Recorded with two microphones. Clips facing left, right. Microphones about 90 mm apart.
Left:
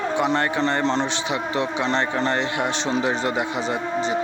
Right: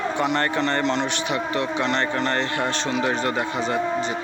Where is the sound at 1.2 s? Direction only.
20° left (ahead or behind).